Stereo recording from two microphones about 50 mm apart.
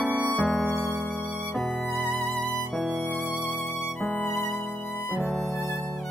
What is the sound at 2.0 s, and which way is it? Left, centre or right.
Music, left.